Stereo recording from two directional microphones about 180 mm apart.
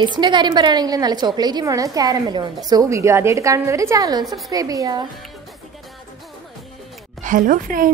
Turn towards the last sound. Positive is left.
turn(degrees=-50)  # may be behind; listen again after turning